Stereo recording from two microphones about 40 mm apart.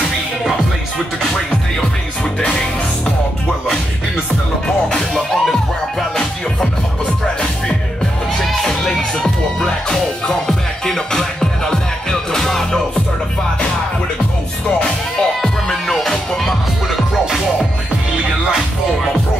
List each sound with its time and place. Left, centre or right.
4.6 s music: left
5.1 s music: centre
8.4 s music: centre
15.4 s music: centre